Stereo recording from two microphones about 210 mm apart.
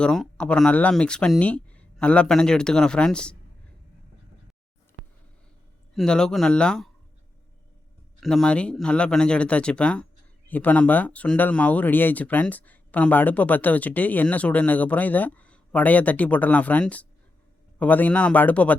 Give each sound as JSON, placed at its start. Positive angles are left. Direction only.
{"t": 0.0, "sound": "speech", "side_deg": 5}
{"t": 5.9, "sound": "speech", "side_deg": 0}
{"t": 8.2, "sound": "speech", "side_deg": 0}